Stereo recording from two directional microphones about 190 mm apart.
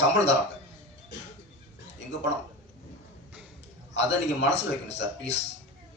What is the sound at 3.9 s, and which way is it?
Speech, 70° left (ahead or behind).